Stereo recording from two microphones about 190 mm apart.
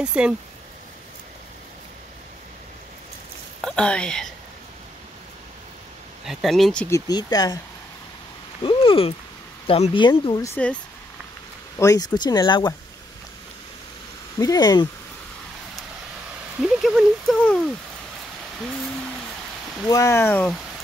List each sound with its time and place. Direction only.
0.0 s speech: 5° right (ahead or behind)
3.6 s speech: 5° left (ahead or behind)
6.2 s speech: centre (ahead or behind)
6.9 s speech: 20° left (ahead or behind)
8.6 s a sound: 30° left (ahead or behind)
9.7 s speech: 25° left (ahead or behind)
10.5 s speech: 5° left (ahead or behind)
11.8 s speech: 20° left (ahead or behind)
14.4 s speech: 20° left (ahead or behind)
16.6 s a sound: centre (ahead or behind)
19.9 s speech: 15° left (ahead or behind)